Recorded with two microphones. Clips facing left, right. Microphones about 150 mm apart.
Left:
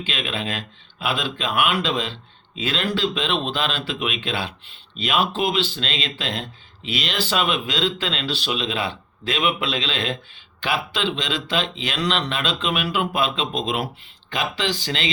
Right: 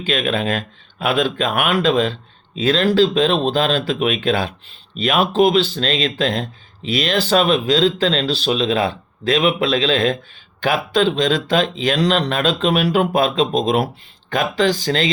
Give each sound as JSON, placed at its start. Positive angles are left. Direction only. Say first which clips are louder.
{"t": 0.0, "sound": "speech", "louder": "right 8 dB", "side_deg": -45}